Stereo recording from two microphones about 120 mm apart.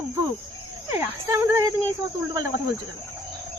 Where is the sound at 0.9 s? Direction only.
20° right (ahead or behind).